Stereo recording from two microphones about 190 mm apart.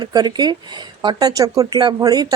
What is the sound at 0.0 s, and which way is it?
Speech, 20° right (ahead or behind).